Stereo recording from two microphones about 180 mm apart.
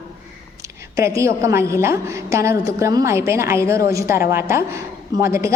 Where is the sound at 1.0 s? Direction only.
15° right (ahead or behind).